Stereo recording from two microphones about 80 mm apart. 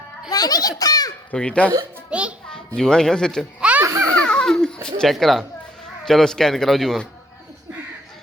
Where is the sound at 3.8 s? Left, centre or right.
Right.